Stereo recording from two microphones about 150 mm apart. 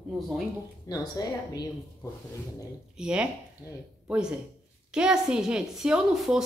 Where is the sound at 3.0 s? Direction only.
5° right (ahead or behind).